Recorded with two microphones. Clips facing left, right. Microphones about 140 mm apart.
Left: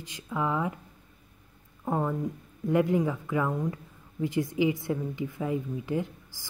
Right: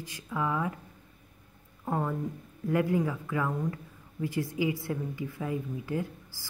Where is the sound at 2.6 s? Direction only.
20° left (ahead or behind).